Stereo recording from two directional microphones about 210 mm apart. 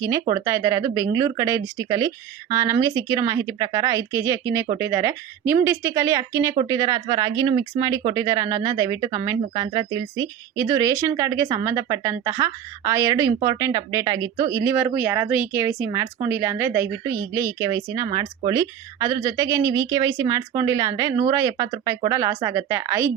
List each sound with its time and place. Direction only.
0.0 s speech: 15° right (ahead or behind)